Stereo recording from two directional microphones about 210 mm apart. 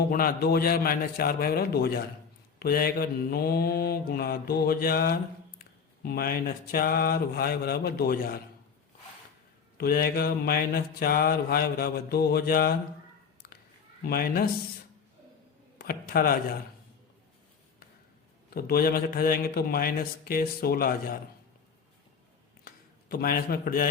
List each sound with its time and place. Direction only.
0.1 s mantra: 45° left (ahead or behind)
9.7 s mantra: 45° left (ahead or behind)
14.0 s mantra: 45° left (ahead or behind)
15.8 s mantra: 45° left (ahead or behind)
18.5 s mantra: 45° left (ahead or behind)
22.6 s a sound: 45° left (ahead or behind)